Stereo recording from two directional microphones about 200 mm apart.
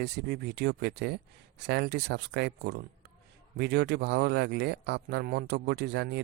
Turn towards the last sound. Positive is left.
turn(degrees=-55)  # may be behind; listen again after turning